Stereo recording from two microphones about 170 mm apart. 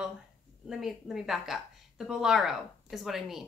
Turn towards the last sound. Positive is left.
turn(degrees=0)  # may be behind; listen again after turning